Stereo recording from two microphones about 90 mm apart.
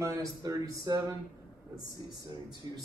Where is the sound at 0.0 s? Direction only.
35° right (ahead or behind).